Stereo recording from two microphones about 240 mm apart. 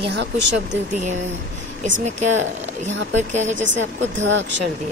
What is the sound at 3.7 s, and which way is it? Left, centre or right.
Speech, right.